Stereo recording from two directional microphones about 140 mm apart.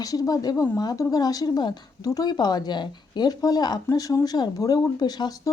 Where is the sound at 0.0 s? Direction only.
25° left (ahead or behind).